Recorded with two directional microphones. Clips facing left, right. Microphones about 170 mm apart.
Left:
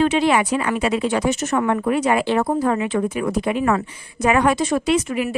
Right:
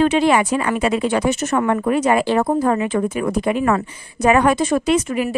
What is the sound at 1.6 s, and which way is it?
Speech, 45° right (ahead or behind).